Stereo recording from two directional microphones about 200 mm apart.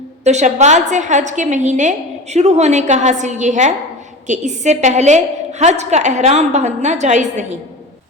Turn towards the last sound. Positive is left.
turn(degrees=-35)  # may be behind; listen again after turning